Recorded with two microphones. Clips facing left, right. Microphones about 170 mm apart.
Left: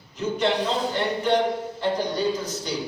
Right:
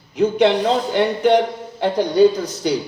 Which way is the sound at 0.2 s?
65° right (ahead or behind).